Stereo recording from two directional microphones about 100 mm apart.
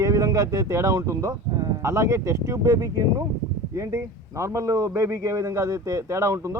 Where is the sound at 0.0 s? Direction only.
35° right (ahead or behind).